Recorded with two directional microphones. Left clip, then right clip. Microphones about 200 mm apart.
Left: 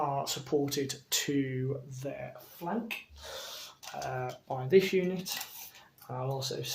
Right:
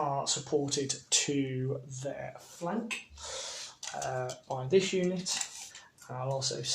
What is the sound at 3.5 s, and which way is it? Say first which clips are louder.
Speech: right 2 dB; 15° left (ahead or behind).